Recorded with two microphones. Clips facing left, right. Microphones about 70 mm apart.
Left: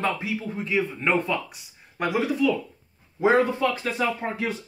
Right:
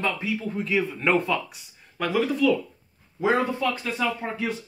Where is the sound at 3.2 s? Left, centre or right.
Left.